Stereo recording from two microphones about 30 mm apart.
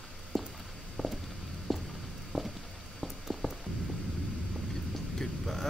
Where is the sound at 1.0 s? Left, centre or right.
Centre.